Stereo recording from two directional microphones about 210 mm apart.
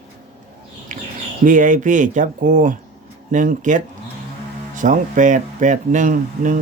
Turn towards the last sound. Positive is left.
turn(degrees=-40)  # may be behind; listen again after turning